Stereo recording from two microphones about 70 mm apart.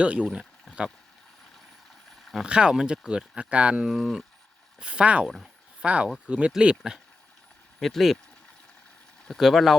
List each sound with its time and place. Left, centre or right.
0.0 s speech: centre
2.3 s speech: centre
3.8 s speech: centre
4.8 s speech: centre
7.8 s speech: centre
9.4 s speech: centre